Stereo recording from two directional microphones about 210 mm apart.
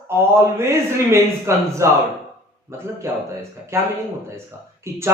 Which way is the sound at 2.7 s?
10° right (ahead or behind).